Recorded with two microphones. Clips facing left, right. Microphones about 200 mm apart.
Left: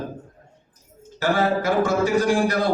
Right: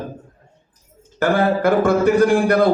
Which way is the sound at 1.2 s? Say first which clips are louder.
Right 4 dB; 60° right (ahead or behind).